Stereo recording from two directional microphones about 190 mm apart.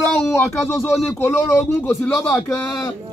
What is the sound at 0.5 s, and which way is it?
A man's voice, 15° left (ahead or behind).